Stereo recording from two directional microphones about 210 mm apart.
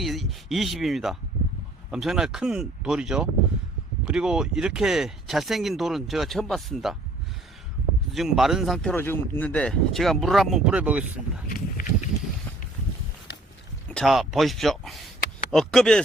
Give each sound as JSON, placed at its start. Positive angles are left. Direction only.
{"t": 0.0, "sound": "speech", "side_deg": 0}
{"t": 8.1, "sound": "speech", "side_deg": 0}
{"t": 11.4, "sound": "a sound", "side_deg": 40}
{"t": 13.9, "sound": "speech", "side_deg": 0}